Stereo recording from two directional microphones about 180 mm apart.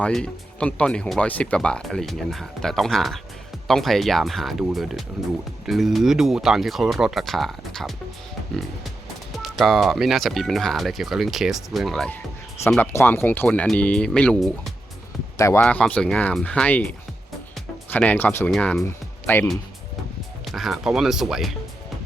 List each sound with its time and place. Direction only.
0.0 s speech: 5° left (ahead or behind)
9.3 s speech: centre (ahead or behind)
12.7 s speech: 10° left (ahead or behind)
15.4 s speech: 15° left (ahead or behind)
15.6 s speech: 5° left (ahead or behind)
17.9 s speech: 10° left (ahead or behind)
20.4 s speech: centre (ahead or behind)